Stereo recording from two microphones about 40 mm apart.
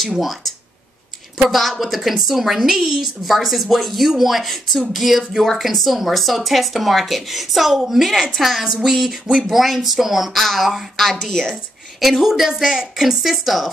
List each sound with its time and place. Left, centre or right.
0.0 s a woman's voice: centre
11.1 s a woman's voice: centre
12.0 s a woman's voice: centre